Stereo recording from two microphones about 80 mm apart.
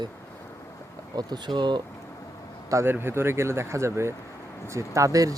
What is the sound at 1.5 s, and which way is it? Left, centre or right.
Speech, right.